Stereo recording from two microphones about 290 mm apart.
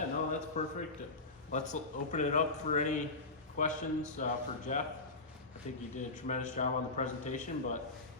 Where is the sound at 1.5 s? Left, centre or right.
Left.